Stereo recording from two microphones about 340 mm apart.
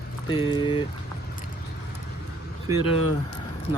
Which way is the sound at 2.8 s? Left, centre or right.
Centre.